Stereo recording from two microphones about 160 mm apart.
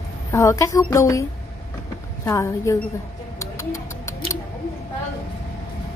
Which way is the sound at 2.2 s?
15° left (ahead or behind).